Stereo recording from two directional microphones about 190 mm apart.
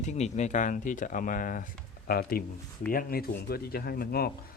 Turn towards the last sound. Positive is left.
turn(degrees=55)  # may be behind; listen again after turning